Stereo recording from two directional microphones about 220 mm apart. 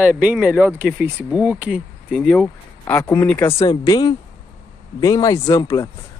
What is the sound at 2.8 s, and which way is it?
Speech, 10° left (ahead or behind).